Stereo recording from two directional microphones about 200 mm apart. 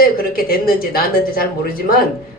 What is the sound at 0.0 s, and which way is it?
Speech, 45° left (ahead or behind).